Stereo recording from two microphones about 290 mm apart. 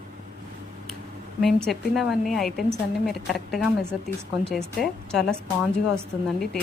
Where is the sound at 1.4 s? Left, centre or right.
Centre.